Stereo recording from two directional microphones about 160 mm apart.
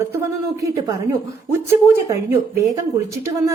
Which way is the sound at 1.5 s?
15° right (ahead or behind).